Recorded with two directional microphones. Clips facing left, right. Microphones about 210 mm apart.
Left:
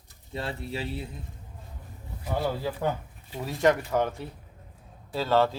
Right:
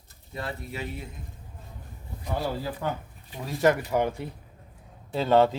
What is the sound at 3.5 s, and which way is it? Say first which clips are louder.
Speech: right 1 dB; 5° right (ahead or behind).